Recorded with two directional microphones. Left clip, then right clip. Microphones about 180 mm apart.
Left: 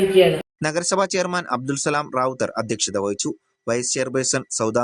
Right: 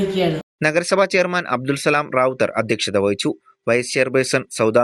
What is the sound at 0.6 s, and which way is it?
Speech, 10° right (ahead or behind).